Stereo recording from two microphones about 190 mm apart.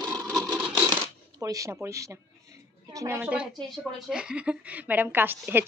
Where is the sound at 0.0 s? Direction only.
20° right (ahead or behind).